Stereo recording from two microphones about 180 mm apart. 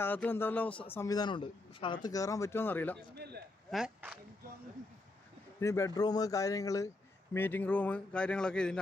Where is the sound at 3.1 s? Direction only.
65° right (ahead or behind).